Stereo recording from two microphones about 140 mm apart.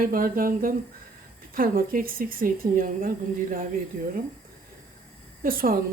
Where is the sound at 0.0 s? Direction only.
90° right.